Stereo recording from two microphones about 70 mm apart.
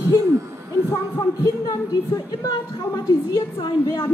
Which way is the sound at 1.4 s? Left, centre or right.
Left.